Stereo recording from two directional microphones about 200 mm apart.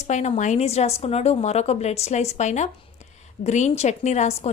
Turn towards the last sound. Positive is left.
turn(degrees=35)  # may be behind; listen again after turning